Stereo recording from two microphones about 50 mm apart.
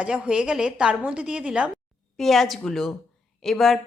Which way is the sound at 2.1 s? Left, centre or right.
Centre.